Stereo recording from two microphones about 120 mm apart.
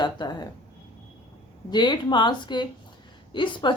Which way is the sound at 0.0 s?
40° left (ahead or behind).